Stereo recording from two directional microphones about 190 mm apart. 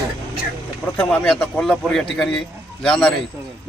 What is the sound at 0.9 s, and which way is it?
Speech, 5° left (ahead or behind).